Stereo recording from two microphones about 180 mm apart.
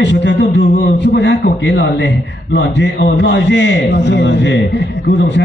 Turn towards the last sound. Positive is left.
turn(degrees=80)